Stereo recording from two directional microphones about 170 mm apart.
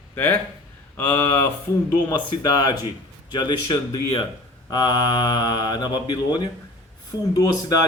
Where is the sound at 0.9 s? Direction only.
10° left (ahead or behind).